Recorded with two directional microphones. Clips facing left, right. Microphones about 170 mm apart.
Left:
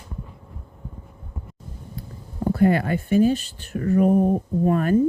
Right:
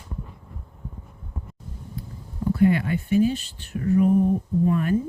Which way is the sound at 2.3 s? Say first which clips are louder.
Left 1 dB; 50° left (ahead or behind).